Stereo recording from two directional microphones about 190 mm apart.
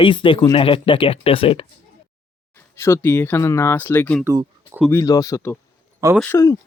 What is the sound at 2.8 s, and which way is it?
Speech, 15° left (ahead or behind).